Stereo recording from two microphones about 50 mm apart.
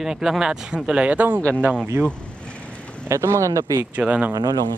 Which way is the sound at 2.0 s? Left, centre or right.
Right.